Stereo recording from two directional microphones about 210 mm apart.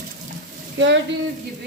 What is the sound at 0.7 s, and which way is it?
Speech, 60° right (ahead or behind).